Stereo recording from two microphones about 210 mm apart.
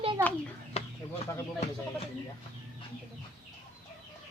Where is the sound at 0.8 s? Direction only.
30° left (ahead or behind).